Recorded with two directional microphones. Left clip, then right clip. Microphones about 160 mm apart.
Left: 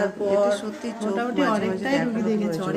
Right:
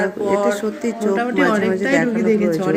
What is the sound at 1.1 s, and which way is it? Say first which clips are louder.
Speech: right 5 dB; centre (ahead or behind).